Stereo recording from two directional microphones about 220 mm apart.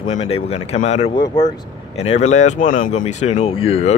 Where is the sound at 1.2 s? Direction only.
15° left (ahead or behind).